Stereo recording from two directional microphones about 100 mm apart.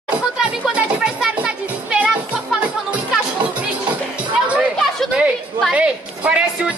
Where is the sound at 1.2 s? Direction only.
10° right (ahead or behind).